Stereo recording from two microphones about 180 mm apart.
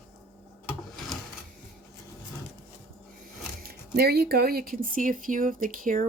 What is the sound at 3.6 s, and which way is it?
Speech, 60° right (ahead or behind).